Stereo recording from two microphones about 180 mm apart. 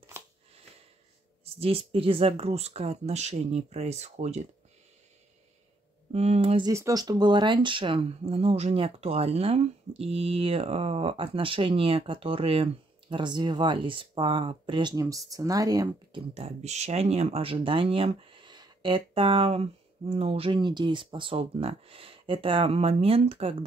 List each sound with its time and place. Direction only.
0.2 s a sound: 15° right (ahead or behind)
1.4 s speech: 35° right (ahead or behind)
6.1 s speech: 35° right (ahead or behind)
6.7 s speech: 20° right (ahead or behind)
16.2 s speech: 35° right (ahead or behind)